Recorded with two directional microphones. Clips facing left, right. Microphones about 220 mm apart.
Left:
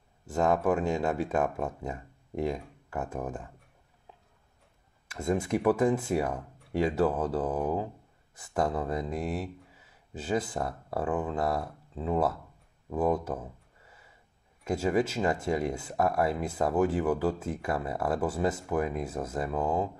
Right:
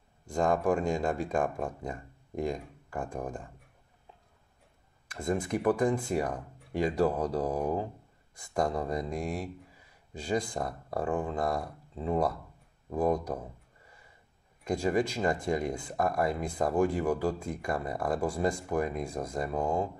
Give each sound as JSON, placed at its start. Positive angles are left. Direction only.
{"t": 0.3, "sound": "speech", "side_deg": 5}
{"t": 5.0, "sound": "speech", "side_deg": 5}